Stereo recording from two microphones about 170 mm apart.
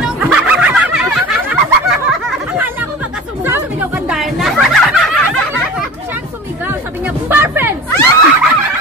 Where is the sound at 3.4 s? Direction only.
10° right (ahead or behind).